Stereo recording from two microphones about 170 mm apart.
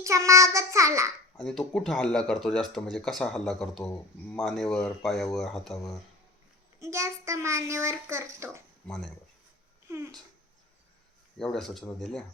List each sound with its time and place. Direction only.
0.0 s child singing: 20° right (ahead or behind)
1.4 s speech: 5° left (ahead or behind)
6.7 s a child's voice: 15° right (ahead or behind)
8.9 s speech: 5° left (ahead or behind)
9.9 s a child's voice: 15° right (ahead or behind)
11.3 s speech: 5° left (ahead or behind)